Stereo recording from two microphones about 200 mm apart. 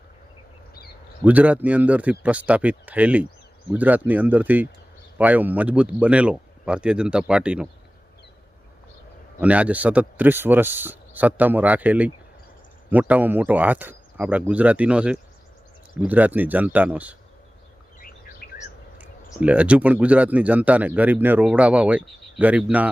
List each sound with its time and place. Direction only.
1.2 s speech: 5° right (ahead or behind)
9.4 s speech: 5° right (ahead or behind)
18.4 s bird: 45° left (ahead or behind)
19.4 s speech: 5° right (ahead or behind)